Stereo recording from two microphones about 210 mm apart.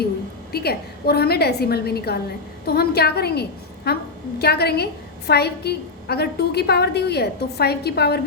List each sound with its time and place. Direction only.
0.5 s a woman's voice: 50° left (ahead or behind)